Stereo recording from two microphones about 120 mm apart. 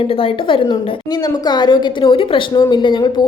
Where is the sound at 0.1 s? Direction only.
50° left (ahead or behind).